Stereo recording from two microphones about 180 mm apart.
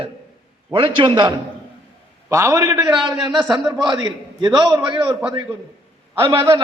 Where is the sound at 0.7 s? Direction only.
30° right (ahead or behind).